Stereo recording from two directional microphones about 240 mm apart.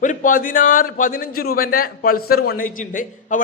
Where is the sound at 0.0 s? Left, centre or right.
Left.